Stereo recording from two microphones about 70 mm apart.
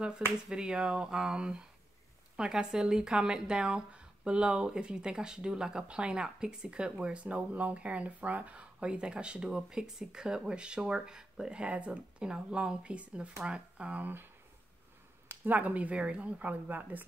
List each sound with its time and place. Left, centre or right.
0.5 s speech: centre
15.4 s a woman's voice: right